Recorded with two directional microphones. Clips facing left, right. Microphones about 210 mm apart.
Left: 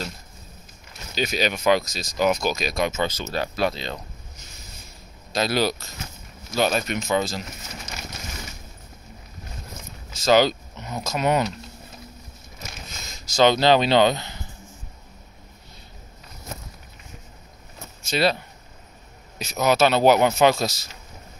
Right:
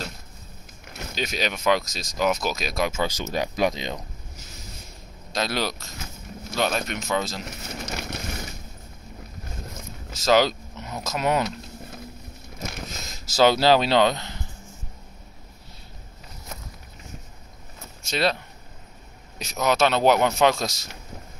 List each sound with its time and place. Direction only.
1.1 s speech: centre (ahead or behind); by 4.0 s 15° right (ahead or behind)
5.3 s speech: 5° left (ahead or behind)
7.8 s a sound: 60° right (ahead or behind)
10.1 s speech: centre (ahead or behind)
13.2 s speech: 5° right (ahead or behind)
18.0 s speech: 5° left (ahead or behind)